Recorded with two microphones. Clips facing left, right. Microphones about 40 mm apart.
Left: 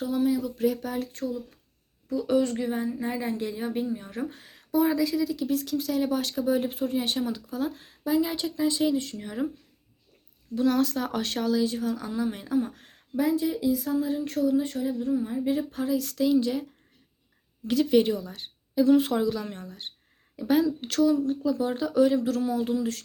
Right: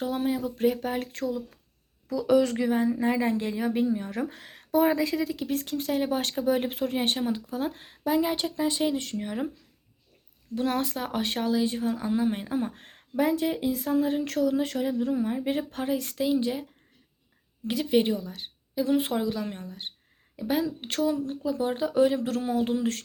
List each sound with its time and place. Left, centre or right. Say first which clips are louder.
0.0 s speech: left 2 dB; right
1.1 s a woman's voice: right 1 dB; right
7.0 s speech: right 2 dB; right
10.5 s speech: left 3 dB; right
10.8 s speech: left 3 dB; right
14.3 s speech: left 1 dB; right
16.1 s speech: left 4 dB; right
17.7 s speech: left 2 dB; centre
18.2 s a woman's voice: even; centre
18.9 s speech: left 4 dB; right
20.7 s speech: left 4 dB; right